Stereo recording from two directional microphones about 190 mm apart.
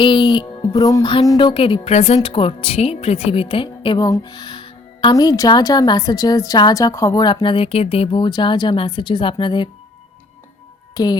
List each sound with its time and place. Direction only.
0.0 s music: 25° left (ahead or behind)
10.9 s speech: 20° left (ahead or behind)